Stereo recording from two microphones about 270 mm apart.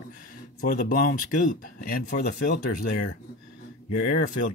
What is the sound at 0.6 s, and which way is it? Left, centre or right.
Speech, left.